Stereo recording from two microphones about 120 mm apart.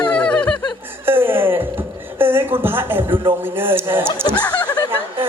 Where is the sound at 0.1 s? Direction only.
10° left (ahead or behind).